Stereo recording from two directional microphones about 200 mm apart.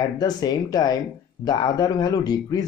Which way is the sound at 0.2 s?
20° left (ahead or behind).